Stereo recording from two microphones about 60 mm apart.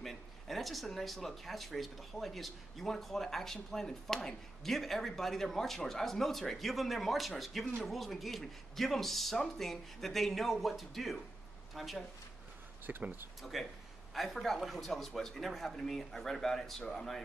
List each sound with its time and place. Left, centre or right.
0.0 s speech: centre
12.9 s speech: right
13.4 s speech: centre